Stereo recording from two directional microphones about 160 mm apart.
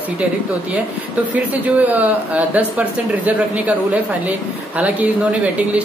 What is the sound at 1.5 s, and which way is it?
Speech, 10° right (ahead or behind).